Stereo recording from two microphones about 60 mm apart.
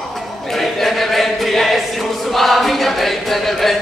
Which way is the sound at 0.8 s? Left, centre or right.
Centre.